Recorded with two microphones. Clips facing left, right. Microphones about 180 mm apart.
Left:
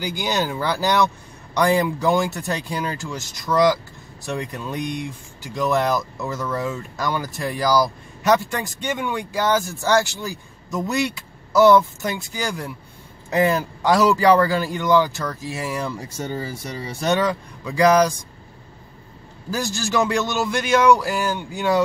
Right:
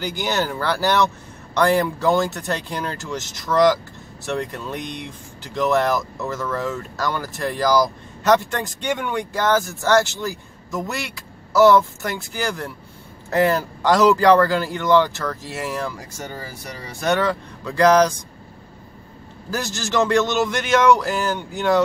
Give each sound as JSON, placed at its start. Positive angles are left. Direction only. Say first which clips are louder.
{"t": 0.0, "sound": "speech", "louder": "even", "side_deg": 15}
{"t": 19.5, "sound": "speech", "louder": "even", "side_deg": 10}